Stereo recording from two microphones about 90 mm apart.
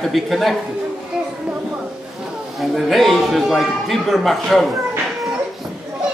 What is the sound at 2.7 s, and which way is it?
A man's voice, centre (ahead or behind).